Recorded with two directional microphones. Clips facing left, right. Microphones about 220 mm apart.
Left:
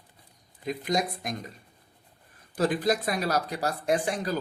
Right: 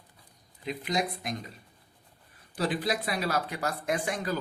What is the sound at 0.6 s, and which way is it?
Speech, 45° left (ahead or behind).